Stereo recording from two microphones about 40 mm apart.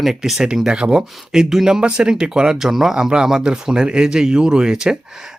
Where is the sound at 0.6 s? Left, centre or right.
Right.